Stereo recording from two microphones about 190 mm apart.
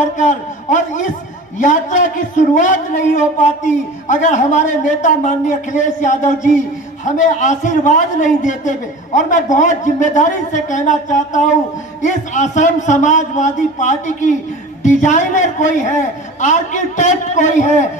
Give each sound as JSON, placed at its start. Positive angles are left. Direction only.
{"t": 0.3, "sound": "a man's voice", "side_deg": 40}